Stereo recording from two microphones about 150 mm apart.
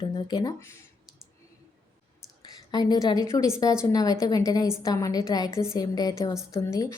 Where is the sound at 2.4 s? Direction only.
25° left (ahead or behind).